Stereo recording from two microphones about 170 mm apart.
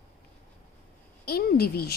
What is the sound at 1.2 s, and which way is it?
Speech, 65° left (ahead or behind).